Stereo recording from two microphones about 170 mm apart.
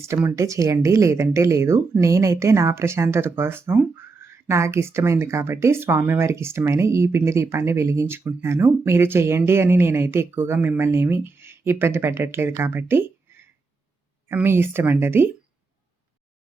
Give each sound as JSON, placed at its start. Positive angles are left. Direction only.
{"t": 0.3, "sound": "speech", "side_deg": -20}